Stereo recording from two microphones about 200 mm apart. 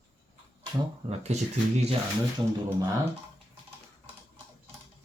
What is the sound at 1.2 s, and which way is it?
Speech, 35° right (ahead or behind).